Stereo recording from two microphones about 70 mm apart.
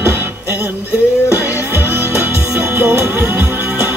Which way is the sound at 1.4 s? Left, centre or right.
Right.